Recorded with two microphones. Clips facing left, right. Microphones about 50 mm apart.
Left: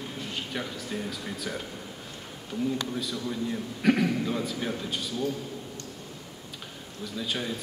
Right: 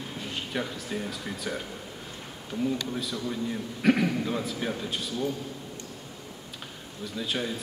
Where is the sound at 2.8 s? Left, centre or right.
Centre.